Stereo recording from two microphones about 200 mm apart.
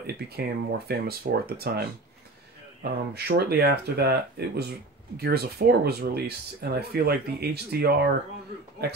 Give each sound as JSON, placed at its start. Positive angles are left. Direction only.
{"t": 0.0, "sound": "speech", "side_deg": -55}